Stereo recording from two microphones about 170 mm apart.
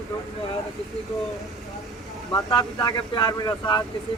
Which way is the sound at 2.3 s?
25° left (ahead or behind).